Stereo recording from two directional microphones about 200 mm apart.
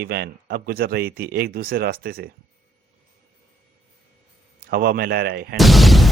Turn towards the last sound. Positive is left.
turn(degrees=0)  # may be behind; listen again after turning